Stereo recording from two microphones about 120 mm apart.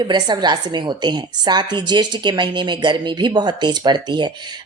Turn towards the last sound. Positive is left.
turn(degrees=-40)  # may be behind; listen again after turning